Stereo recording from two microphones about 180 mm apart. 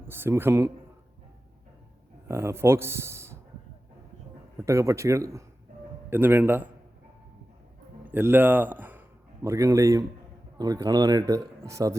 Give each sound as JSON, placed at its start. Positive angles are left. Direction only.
{"t": 0.1, "sound": "speech", "side_deg": -15}
{"t": 2.2, "sound": "speech", "side_deg": -15}
{"t": 4.6, "sound": "speech", "side_deg": -15}
{"t": 8.1, "sound": "a man's voice", "side_deg": -10}